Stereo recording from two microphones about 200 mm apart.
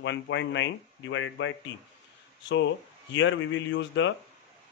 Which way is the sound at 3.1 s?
65° left (ahead or behind).